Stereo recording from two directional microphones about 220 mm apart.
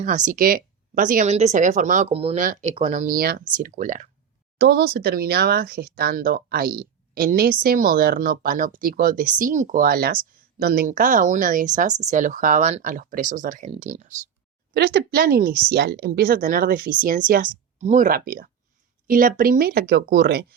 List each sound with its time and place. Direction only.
0.0 s speech: 35° right (ahead or behind)
4.5 s speech: 45° right (ahead or behind)
14.7 s speech: 45° right (ahead or behind)